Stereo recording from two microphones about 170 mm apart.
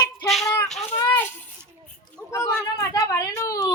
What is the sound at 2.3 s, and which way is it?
Speech, 15° left (ahead or behind).